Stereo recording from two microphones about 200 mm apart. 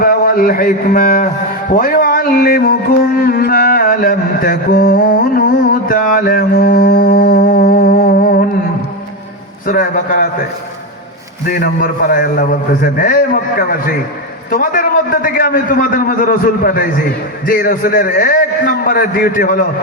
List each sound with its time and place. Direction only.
0.0 s a man's voice: 45° left (ahead or behind)
1.7 s music: 45° left (ahead or behind)
9.6 s a man's voice: 45° left (ahead or behind)
11.4 s a man's voice: 45° left (ahead or behind)